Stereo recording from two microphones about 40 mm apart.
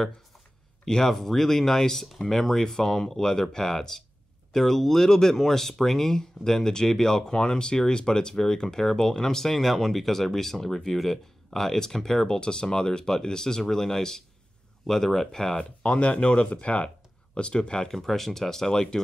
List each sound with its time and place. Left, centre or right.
0.8 s speech: centre
15.8 s speech: left
17.9 s speech: centre